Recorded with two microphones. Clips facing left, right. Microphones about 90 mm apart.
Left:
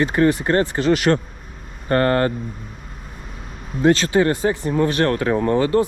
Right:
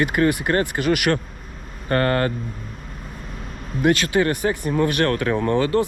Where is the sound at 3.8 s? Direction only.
30° left (ahead or behind).